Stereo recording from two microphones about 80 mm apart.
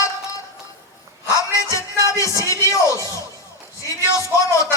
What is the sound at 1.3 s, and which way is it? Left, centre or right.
Music, left.